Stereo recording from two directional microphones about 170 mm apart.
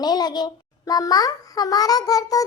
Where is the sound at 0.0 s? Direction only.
25° left (ahead or behind).